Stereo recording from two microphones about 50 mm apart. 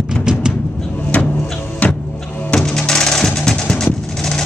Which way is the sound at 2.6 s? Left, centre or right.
Centre.